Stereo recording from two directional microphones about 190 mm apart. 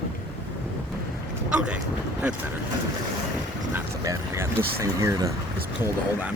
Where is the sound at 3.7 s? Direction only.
15° right (ahead or behind).